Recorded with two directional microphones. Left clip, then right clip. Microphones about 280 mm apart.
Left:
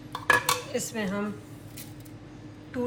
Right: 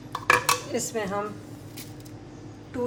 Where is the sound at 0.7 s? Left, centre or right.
Right.